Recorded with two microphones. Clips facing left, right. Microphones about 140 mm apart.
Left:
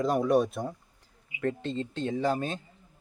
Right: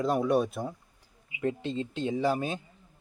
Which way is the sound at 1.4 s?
10° right (ahead or behind).